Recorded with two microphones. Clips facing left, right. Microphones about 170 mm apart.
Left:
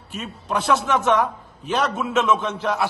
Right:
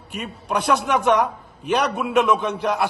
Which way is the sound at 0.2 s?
15° right (ahead or behind).